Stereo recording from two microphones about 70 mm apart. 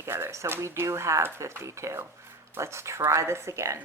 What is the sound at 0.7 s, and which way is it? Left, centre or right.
Speech, right.